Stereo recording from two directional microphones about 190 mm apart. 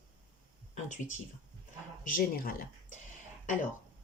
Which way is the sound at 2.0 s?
50° left (ahead or behind).